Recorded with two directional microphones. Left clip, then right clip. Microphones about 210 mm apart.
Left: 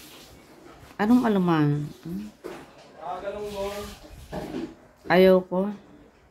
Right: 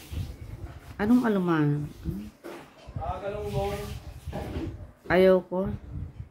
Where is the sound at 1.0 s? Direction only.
5° left (ahead or behind).